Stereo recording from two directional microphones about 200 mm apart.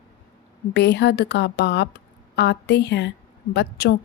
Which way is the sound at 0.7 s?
55° left (ahead or behind).